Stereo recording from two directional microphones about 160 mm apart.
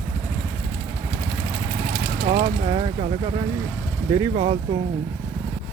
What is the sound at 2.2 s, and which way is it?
Pulleys, 40° right (ahead or behind).